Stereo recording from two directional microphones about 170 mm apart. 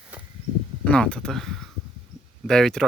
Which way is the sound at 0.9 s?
5° left (ahead or behind).